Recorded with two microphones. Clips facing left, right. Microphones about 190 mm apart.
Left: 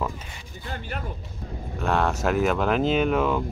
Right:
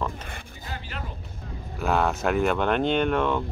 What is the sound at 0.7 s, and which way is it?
Speech, 50° left (ahead or behind).